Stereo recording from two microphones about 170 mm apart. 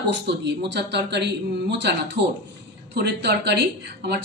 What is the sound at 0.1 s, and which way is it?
Speech, 85° right.